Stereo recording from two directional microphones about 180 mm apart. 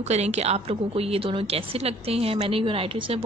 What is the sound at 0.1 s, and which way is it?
A woman's voice, 35° right (ahead or behind).